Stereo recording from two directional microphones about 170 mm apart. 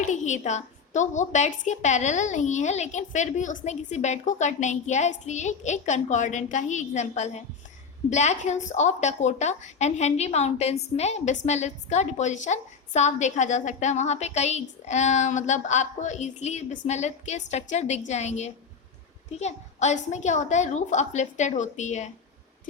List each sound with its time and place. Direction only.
0.0 s a woman's voice: 45° left (ahead or behind)